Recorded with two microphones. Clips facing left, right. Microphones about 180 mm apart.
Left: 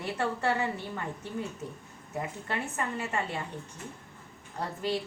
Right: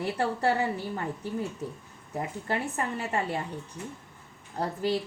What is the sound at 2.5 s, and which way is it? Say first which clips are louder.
Speech: right 5 dB; 30° right (ahead or behind).